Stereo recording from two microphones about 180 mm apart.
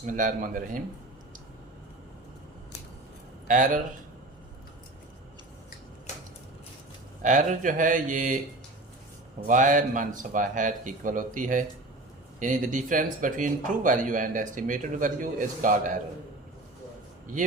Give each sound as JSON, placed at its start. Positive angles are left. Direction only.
{"t": 0.0, "sound": "a man's voice", "side_deg": -45}
{"t": 3.4, "sound": "speech", "side_deg": -45}
{"t": 7.2, "sound": "a man's voice", "side_deg": -45}
{"t": 9.5, "sound": "a man's voice", "side_deg": -45}